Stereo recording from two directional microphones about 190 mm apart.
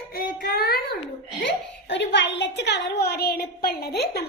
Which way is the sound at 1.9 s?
65° left (ahead or behind).